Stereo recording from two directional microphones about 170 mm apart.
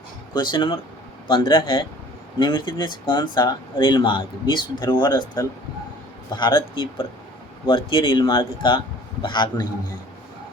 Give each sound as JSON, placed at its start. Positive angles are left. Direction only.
{"t": 0.3, "sound": "speech", "side_deg": 25}